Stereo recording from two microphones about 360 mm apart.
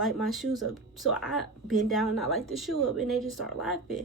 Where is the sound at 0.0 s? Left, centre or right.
Centre.